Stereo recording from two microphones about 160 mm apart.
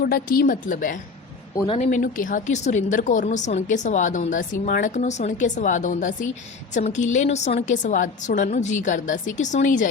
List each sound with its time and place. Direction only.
0.0 s a woman's voice: 70° left (ahead or behind)
1.6 s a woman's voice: 35° left (ahead or behind)
1.9 s a woman's voice: 55° left (ahead or behind)